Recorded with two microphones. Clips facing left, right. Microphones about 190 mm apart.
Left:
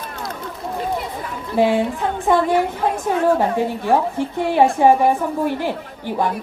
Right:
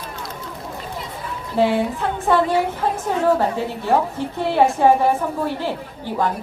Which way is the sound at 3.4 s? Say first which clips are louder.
Left 3 dB; 15° left (ahead or behind).